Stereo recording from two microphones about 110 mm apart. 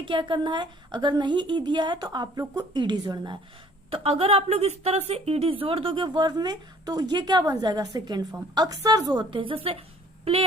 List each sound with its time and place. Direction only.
0.0 s a woman's voice: 45° right (ahead or behind)
3.8 s a woman's voice: 55° right (ahead or behind)